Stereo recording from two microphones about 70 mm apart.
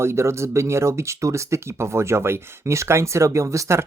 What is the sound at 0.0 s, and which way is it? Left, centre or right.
Speech, right.